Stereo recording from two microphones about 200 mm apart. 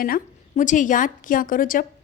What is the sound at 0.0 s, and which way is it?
A woman's voice, 40° left (ahead or behind).